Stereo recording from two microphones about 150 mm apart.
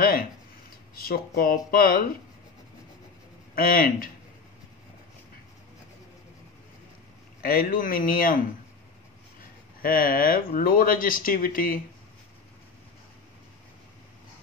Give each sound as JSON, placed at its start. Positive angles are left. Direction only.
{"t": 0.9, "sound": "speech", "side_deg": 80}
{"t": 3.5, "sound": "speech", "side_deg": 75}
{"t": 7.4, "sound": "speech", "side_deg": 75}
{"t": 9.8, "sound": "speech", "side_deg": 75}